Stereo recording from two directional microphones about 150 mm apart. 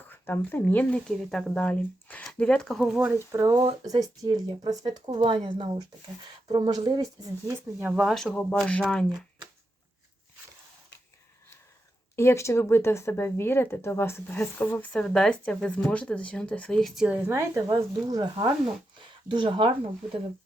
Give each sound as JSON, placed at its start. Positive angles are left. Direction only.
{"t": 0.1, "sound": "speech", "side_deg": 15}
{"t": 3.2, "sound": "speech", "side_deg": -20}
{"t": 12.1, "sound": "speech", "side_deg": 20}